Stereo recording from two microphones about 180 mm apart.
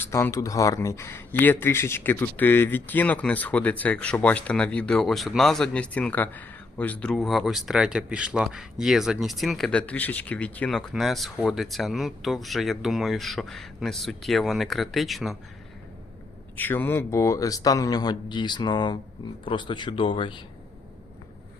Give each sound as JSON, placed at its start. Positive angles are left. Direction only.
{"t": 0.0, "sound": "speech", "side_deg": 15}
{"t": 16.6, "sound": "speech", "side_deg": 10}